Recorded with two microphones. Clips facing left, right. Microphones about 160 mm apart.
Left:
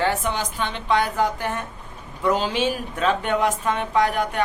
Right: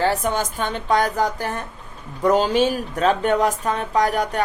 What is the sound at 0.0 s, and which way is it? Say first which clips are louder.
Speech: right 3 dB; 40° right (ahead or behind).